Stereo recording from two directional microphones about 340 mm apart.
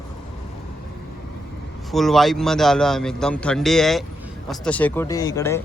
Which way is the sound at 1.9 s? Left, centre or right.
Centre.